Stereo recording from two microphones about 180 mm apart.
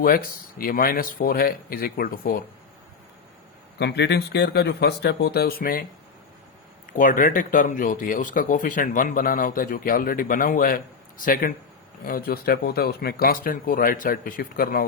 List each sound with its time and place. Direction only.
0.6 s speech: 55° left (ahead or behind)
3.8 s speech: 70° left (ahead or behind); by 5.8 s 55° left (ahead or behind)
6.9 s speech: 45° left (ahead or behind)